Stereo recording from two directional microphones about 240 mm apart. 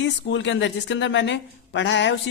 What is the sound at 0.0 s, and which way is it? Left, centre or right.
Speech, left.